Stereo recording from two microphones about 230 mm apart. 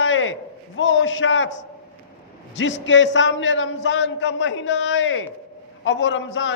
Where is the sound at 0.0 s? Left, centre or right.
Left.